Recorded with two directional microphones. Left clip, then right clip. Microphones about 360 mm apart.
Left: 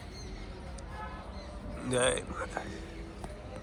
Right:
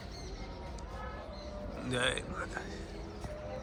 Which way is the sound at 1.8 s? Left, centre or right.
Centre.